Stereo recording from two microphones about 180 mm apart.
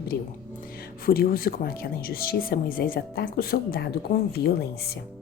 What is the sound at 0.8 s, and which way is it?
Speech, 55° left (ahead or behind).